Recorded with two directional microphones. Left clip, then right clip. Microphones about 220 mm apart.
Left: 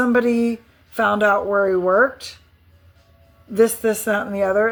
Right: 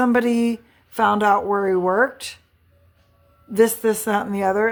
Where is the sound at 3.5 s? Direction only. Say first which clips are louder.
Even; 20° right (ahead or behind).